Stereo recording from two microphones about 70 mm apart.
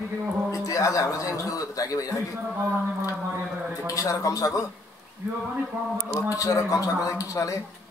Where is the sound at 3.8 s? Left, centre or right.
Left.